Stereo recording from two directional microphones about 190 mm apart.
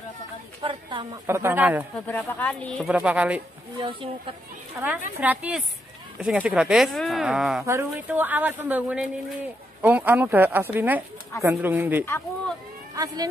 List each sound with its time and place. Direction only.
0.6 s speech: 25° right (ahead or behind)
1.2 s a man's voice: 10° right (ahead or behind)
2.0 s speech: 10° left (ahead or behind)
2.9 s a man's voice: 5° right (ahead or behind)
3.8 s speech: 30° right (ahead or behind)
4.8 s a man's voice: 15° right (ahead or behind)
7.6 s a man's voice: 10° right (ahead or behind)